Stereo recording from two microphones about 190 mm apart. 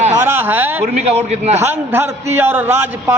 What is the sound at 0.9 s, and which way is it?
Speech, 35° right (ahead or behind).